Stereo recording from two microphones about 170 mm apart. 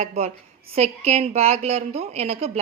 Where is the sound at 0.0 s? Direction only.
40° right (ahead or behind).